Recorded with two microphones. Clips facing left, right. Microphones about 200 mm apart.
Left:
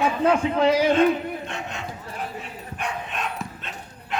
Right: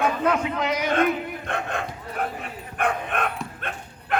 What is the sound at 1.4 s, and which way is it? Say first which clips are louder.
Bow-wow: right 4 dB; 55° right (ahead or behind).